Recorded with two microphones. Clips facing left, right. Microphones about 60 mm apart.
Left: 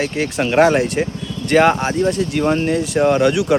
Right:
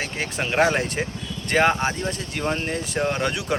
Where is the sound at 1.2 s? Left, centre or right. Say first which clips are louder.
Left 7 dB; right.